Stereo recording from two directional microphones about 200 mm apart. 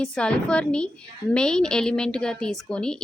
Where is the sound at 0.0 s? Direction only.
5° left (ahead or behind).